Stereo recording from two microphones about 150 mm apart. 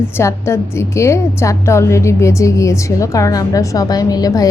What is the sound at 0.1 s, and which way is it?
A woman's voice, 20° left (ahead or behind).